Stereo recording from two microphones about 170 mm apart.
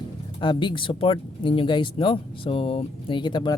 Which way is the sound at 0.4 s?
30° left (ahead or behind).